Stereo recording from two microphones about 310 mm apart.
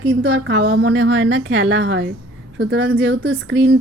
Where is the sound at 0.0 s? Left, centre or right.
Right.